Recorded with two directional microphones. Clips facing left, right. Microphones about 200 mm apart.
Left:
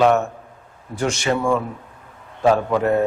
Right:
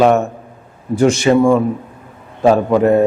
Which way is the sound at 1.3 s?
25° right (ahead or behind).